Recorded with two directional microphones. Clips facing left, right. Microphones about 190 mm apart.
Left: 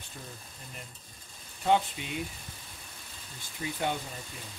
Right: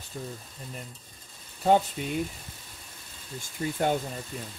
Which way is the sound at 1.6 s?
40° right (ahead or behind).